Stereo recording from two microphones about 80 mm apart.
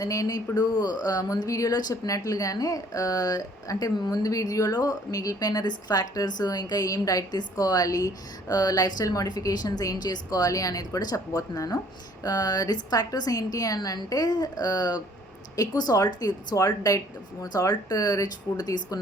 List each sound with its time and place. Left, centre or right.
0.0 s speech: left